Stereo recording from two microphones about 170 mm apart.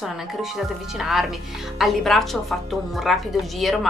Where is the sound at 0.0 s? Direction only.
Centre (ahead or behind).